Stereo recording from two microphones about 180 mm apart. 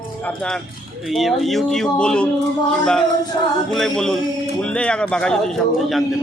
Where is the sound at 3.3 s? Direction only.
20° left (ahead or behind).